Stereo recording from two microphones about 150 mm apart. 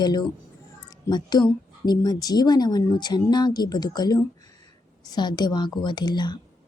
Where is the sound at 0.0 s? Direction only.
30° left (ahead or behind).